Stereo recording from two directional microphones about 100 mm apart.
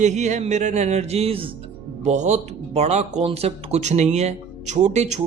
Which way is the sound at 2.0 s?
90° right.